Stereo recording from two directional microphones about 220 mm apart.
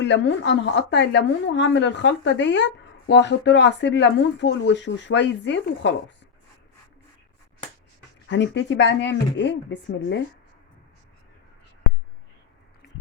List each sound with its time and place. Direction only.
0.0 s a woman's voice: 55° left (ahead or behind)
8.3 s speech: 55° left (ahead or behind)